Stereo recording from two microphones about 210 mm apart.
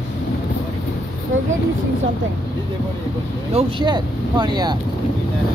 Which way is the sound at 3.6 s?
20° right (ahead or behind).